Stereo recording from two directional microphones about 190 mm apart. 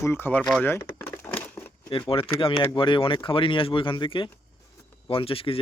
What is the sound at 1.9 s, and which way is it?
Speech, 25° left (ahead or behind).